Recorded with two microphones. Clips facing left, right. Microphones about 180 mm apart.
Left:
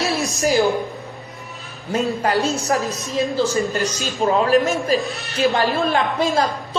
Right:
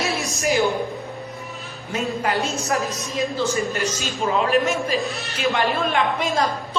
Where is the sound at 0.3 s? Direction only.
35° left (ahead or behind).